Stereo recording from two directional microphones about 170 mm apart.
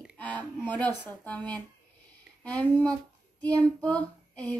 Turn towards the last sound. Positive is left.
turn(degrees=10)  # may be behind; listen again after turning